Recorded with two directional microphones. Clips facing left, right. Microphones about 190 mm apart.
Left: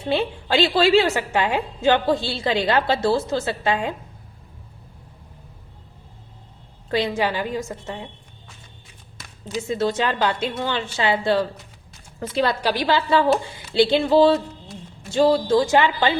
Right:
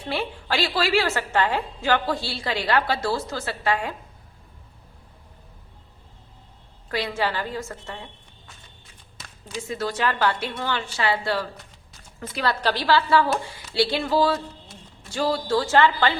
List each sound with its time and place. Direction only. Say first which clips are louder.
0.1 s a woman's voice: left 6 dB; 20° left (ahead or behind)
6.8 s a woman's voice: left 4 dB; 25° left (ahead or behind)
9.6 s a woman's voice: left 4 dB; 25° left (ahead or behind)